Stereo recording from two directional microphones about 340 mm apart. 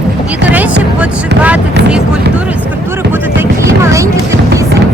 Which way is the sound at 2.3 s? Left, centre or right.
Centre.